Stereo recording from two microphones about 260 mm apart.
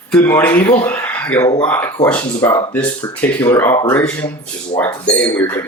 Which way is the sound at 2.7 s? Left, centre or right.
Centre.